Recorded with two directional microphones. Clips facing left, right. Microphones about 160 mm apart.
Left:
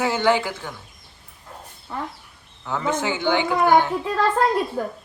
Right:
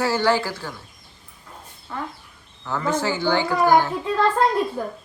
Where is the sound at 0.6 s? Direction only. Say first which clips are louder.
Right 1 dB; 5° right (ahead or behind).